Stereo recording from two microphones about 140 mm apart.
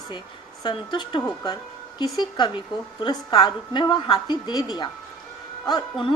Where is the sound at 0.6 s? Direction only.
35° left (ahead or behind).